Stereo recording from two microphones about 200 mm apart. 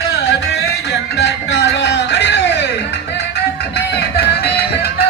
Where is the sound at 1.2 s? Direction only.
60° left (ahead or behind).